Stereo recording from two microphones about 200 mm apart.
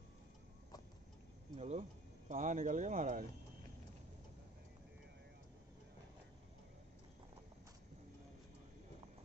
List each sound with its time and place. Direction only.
1.6 s speech: 35° right (ahead or behind)